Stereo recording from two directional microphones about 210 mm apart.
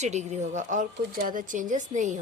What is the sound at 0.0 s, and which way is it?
Speech, 35° right (ahead or behind).